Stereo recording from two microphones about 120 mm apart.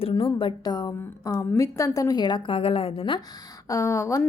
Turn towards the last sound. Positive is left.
turn(degrees=25)  # may be behind; listen again after turning